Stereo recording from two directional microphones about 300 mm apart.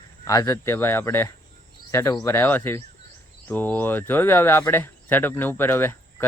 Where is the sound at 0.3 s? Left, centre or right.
Centre.